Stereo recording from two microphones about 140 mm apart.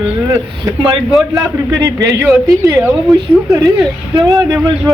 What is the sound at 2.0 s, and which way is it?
A woman's voice, 20° right (ahead or behind).